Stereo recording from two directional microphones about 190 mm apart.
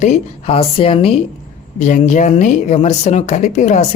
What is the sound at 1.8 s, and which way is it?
Speech, 40° left (ahead or behind).